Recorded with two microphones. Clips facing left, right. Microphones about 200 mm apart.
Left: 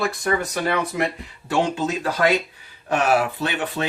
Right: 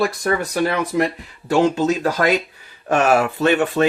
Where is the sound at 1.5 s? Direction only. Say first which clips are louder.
Right 6 dB; 40° right (ahead or behind).